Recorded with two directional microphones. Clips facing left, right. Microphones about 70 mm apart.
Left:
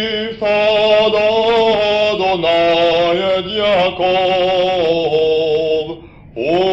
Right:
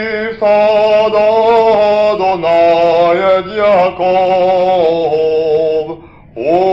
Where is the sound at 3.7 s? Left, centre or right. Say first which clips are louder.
Right 3 dB; right.